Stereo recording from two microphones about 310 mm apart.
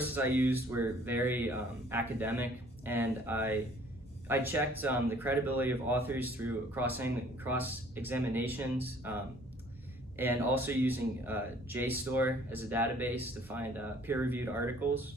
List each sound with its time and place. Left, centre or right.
0.0 s speech: centre